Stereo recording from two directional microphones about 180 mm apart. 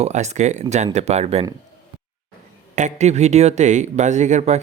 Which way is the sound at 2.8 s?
40° right (ahead or behind).